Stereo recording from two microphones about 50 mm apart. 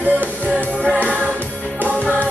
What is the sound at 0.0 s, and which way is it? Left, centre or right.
Music, right.